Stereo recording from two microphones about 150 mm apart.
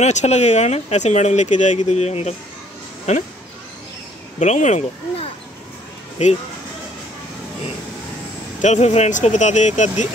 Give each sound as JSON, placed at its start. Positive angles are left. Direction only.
{"t": 0.0, "sound": "speech", "side_deg": 50}
{"t": 4.4, "sound": "speech", "side_deg": 50}
{"t": 8.5, "sound": "speech", "side_deg": 50}